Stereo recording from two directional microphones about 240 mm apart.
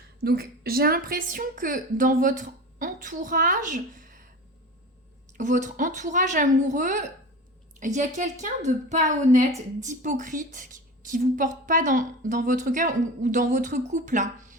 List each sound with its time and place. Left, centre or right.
0.2 s a woman's voice: right
5.4 s a woman's voice: right